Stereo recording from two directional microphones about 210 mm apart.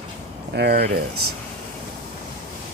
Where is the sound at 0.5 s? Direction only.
50° right (ahead or behind).